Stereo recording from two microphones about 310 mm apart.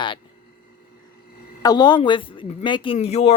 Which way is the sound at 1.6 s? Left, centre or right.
Centre.